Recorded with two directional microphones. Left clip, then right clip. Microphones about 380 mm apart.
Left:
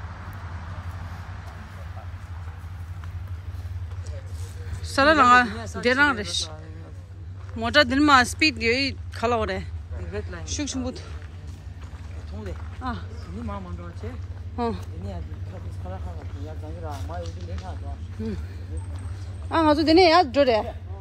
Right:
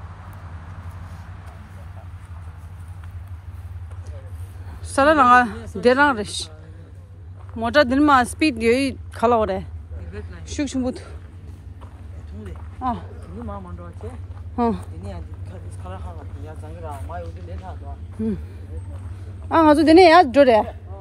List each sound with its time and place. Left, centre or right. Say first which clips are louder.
4.8 s speech: right 2 dB; centre
7.5 s speech: right 3 dB; centre
10.4 s speech: right 8 dB; centre
14.6 s speech: right 6 dB; centre
19.5 s speech: right 6 dB; centre